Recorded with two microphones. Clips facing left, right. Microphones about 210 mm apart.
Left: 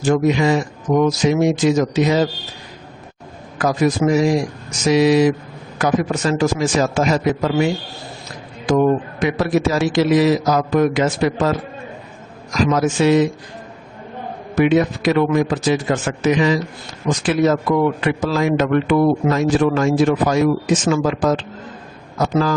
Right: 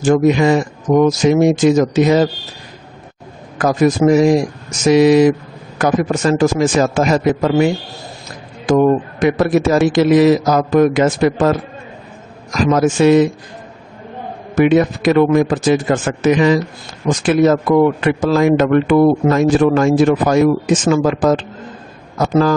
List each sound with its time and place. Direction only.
0.0 s a man's voice: 50° right (ahead or behind)
3.5 s a man's voice: 50° right (ahead or behind)
12.7 s a man's voice: 50° right (ahead or behind)
14.5 s a man's voice: 50° right (ahead or behind)